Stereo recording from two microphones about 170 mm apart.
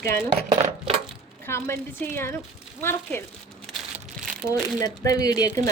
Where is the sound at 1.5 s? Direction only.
15° left (ahead or behind).